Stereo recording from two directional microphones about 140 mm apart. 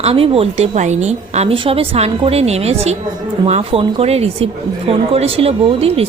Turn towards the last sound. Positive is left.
turn(degrees=-45)  # may be behind; listen again after turning